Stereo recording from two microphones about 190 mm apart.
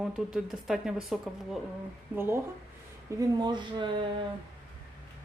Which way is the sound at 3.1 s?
20° right (ahead or behind).